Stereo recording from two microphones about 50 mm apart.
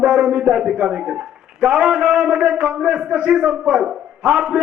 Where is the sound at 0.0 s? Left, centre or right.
Centre.